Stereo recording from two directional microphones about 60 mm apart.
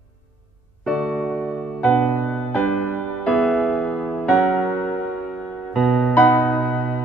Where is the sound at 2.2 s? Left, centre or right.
Centre.